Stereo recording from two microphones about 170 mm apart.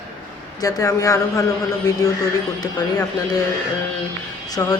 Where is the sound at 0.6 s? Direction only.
20° left (ahead or behind).